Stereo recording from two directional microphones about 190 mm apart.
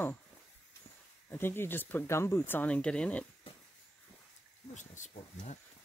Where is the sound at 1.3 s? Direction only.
10° left (ahead or behind).